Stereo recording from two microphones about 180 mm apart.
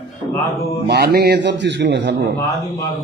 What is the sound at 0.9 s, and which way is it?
A man's voice, 60° right (ahead or behind).